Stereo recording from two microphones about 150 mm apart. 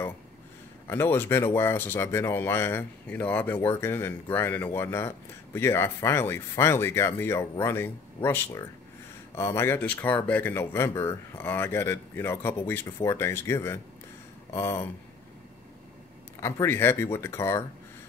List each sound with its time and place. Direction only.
0.8 s speech: 15° left (ahead or behind)
16.3 s speech: 20° left (ahead or behind)